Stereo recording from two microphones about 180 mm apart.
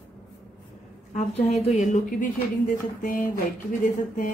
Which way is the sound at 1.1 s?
40° left (ahead or behind).